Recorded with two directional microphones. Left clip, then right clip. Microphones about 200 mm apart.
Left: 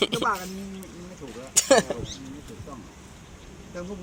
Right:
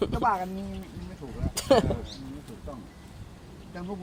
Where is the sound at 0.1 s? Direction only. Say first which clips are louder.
Even; 45° right (ahead or behind).